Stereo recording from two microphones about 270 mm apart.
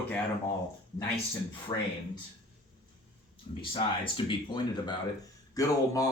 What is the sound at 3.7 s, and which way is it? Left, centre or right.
Speech, centre.